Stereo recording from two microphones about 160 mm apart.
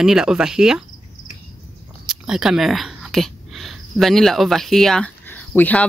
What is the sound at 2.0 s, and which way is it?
Speech, 5° right (ahead or behind).